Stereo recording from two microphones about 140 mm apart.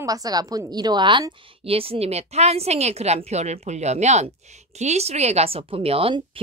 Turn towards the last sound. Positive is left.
turn(degrees=-40)  # may be behind; listen again after turning